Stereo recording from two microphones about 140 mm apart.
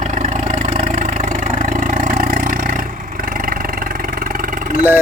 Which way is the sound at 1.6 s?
75° right (ahead or behind).